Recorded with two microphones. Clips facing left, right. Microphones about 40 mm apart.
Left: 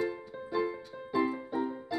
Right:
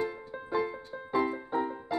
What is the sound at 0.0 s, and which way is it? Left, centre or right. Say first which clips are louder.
Music: even; centre.